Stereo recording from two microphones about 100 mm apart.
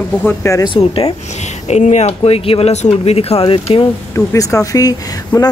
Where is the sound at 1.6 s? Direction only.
85° left.